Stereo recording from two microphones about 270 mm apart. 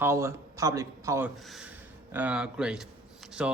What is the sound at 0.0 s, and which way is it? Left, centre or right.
A man's voice, centre.